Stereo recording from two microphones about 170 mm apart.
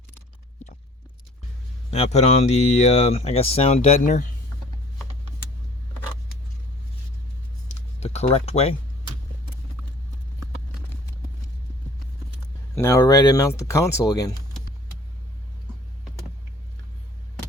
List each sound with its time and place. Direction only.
1.9 s speech: 40° left (ahead or behind)
7.7 s a sound: 40° left (ahead or behind)
12.7 s speech: 15° left (ahead or behind)